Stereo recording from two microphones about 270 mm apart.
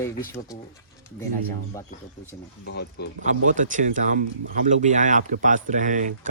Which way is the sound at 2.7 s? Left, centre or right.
Left.